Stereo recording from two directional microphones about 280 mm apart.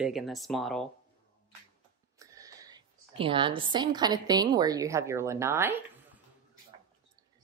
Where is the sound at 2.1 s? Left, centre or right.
Centre.